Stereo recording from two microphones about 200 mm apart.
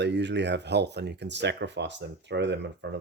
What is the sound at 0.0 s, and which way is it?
Speech, 60° right (ahead or behind).